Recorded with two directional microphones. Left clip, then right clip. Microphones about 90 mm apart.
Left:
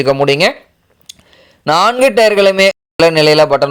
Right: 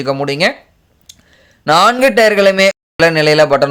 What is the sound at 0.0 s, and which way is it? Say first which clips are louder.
Speech: left 4 dB; 40° left (ahead or behind).